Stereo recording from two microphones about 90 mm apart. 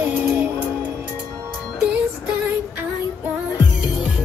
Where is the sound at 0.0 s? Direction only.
20° right (ahead or behind).